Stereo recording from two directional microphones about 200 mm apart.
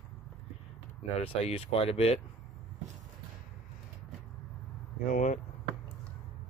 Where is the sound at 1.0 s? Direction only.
30° left (ahead or behind).